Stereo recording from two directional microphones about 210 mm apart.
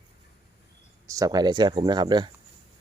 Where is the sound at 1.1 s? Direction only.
15° right (ahead or behind).